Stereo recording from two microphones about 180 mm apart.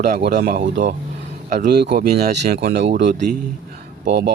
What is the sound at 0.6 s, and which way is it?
Speech, 45° right (ahead or behind).